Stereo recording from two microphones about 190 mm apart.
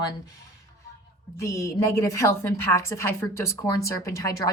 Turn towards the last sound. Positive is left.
turn(degrees=20)  # may be behind; listen again after turning